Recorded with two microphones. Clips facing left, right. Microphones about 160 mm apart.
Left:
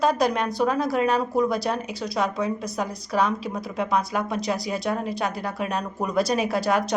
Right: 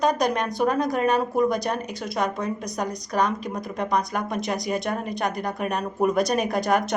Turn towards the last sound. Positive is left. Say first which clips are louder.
# even
turn(degrees=5)  # may be behind; listen again after turning